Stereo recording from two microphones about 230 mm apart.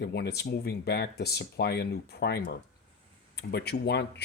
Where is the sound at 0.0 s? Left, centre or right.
Left.